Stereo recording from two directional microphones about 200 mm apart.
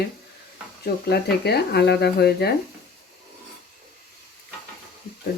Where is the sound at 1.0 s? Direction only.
55° left (ahead or behind).